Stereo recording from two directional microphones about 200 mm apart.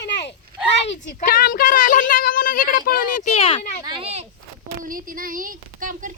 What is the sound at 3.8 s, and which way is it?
Speech, 30° right (ahead or behind).